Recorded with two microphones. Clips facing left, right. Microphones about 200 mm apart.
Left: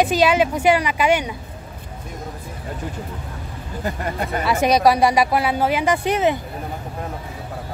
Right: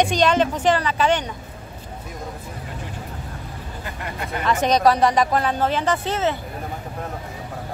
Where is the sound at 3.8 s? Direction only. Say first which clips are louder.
Left 7 dB; 40° left (ahead or behind).